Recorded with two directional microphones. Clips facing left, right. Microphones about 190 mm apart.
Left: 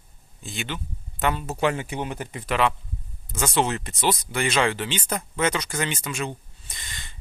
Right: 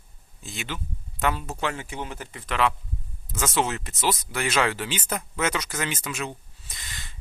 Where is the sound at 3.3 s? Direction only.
Centre (ahead or behind).